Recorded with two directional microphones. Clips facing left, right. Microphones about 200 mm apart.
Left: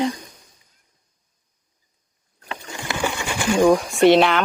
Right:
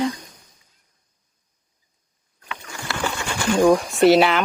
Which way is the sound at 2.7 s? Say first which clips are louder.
Left 2 dB; 20° left (ahead or behind).